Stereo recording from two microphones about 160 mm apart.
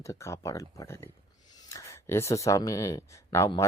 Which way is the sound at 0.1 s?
20° left (ahead or behind).